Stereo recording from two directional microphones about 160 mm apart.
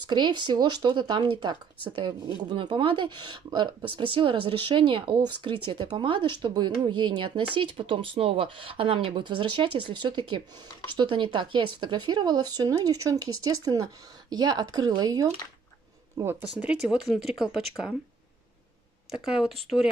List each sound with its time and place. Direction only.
0.1 s speech: 30° right (ahead or behind)
16.2 s speech: 15° right (ahead or behind)
19.0 s speech: 5° right (ahead or behind)